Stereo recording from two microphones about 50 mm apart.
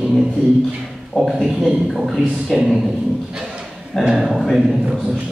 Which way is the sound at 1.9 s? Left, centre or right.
Centre.